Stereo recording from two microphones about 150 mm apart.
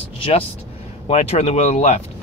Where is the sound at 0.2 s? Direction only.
40° left (ahead or behind).